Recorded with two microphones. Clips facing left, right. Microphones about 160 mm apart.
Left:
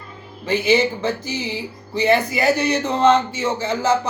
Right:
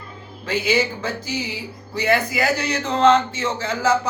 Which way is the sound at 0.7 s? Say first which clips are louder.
Left 4 dB; 20° left (ahead or behind).